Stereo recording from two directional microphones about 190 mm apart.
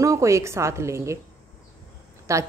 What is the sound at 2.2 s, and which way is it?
Speech, 15° right (ahead or behind).